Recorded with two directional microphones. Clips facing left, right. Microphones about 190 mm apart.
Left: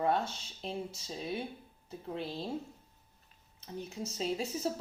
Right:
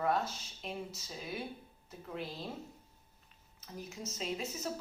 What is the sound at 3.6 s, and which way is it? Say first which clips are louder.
A woman's voice: left 4 dB; 30° left (ahead or behind).